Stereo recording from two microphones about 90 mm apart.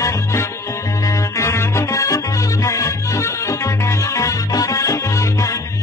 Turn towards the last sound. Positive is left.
turn(degrees=35)  # may be behind; listen again after turning